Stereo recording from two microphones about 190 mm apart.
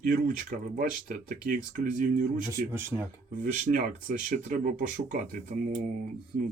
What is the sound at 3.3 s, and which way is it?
Speech, 40° right (ahead or behind).